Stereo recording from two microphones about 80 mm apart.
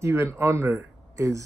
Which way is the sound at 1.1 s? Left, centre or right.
Right.